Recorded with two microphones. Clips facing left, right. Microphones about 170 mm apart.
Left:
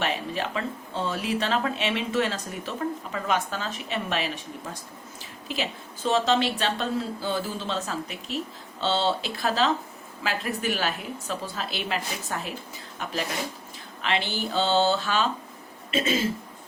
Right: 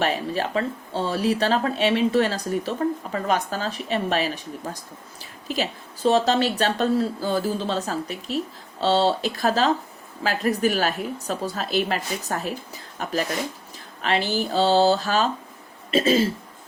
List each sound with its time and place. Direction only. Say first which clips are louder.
0.0 s speech: right 4 dB; 40° right (ahead or behind)